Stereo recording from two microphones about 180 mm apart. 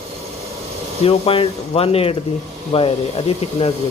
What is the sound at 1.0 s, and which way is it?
Speech, 30° left (ahead or behind).